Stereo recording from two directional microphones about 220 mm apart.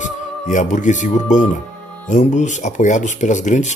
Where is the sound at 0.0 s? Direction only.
35° left (ahead or behind).